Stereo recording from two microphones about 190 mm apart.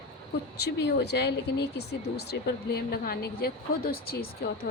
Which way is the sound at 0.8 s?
60° left (ahead or behind).